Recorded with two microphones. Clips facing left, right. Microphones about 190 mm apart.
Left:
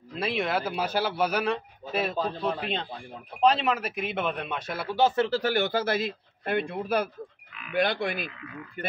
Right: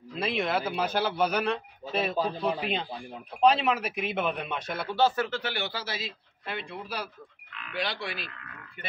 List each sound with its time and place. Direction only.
0.1 s speech: centre (ahead or behind)
2.0 s speech: 5° right (ahead or behind)
5.0 s speech: 25° left (ahead or behind)
5.4 s speech: 45° left (ahead or behind)